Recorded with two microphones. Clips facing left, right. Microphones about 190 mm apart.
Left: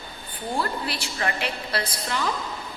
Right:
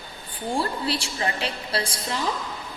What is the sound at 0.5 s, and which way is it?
A woman's voice, 30° right (ahead or behind).